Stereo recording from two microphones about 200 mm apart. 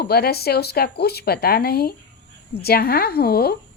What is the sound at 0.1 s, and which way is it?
A woman's voice, 50° left (ahead or behind).